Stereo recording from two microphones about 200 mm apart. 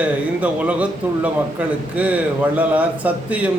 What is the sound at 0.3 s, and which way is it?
A man's voice, 5° right (ahead or behind).